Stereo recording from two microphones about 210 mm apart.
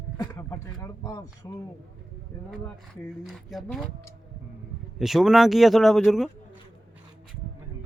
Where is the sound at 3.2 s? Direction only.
Centre (ahead or behind).